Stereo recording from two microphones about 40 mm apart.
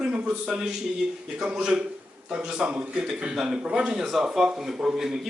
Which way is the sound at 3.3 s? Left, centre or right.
Centre.